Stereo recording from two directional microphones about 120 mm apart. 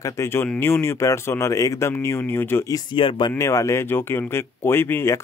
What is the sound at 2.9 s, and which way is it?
Speech, 45° left (ahead or behind).